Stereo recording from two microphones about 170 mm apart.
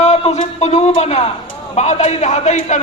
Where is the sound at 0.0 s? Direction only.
40° left (ahead or behind).